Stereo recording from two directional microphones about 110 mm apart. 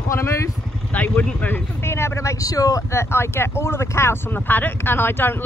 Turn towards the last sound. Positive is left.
turn(degrees=20)  # may be behind; listen again after turning